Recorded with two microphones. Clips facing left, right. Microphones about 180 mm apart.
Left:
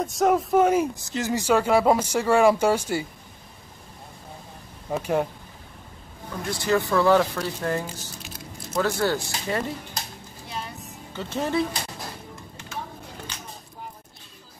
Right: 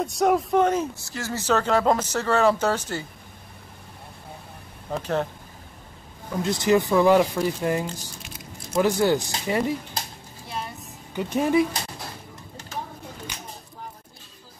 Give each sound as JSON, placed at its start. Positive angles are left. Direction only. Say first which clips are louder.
{"t": 0.0, "sound": "speech", "louder": "even", "side_deg": 0}
{"t": 4.9, "sound": "speech", "louder": "left 2 dB", "side_deg": 10}
{"t": 6.4, "sound": "speech", "louder": "right 3 dB", "side_deg": -20}
{"t": 11.1, "sound": "speech", "louder": "right 5 dB", "side_deg": -15}